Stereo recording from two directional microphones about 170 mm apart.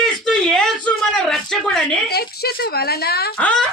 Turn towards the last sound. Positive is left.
turn(degrees=5)  # may be behind; listen again after turning